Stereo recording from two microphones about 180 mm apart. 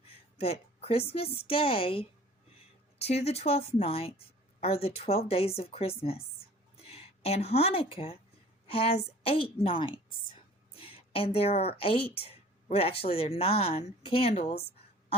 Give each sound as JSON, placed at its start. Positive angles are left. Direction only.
{"t": 0.3, "sound": "speech", "side_deg": 35}
{"t": 3.2, "sound": "speech", "side_deg": 35}
{"t": 10.8, "sound": "a sound", "side_deg": 30}
{"t": 11.8, "sound": "speech", "side_deg": 30}